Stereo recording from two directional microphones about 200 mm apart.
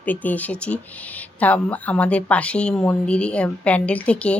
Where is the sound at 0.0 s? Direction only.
10° left (ahead or behind).